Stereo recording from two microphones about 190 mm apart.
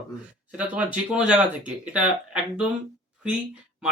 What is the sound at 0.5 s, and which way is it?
Speech, 5° right (ahead or behind).